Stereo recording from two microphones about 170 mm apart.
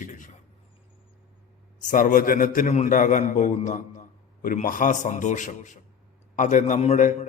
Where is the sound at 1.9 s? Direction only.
50° left (ahead or behind).